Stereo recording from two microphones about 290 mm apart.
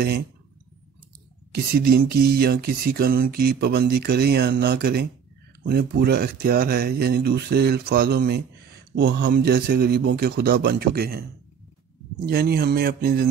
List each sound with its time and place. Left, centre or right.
1.5 s speech: right
12.3 s speech: right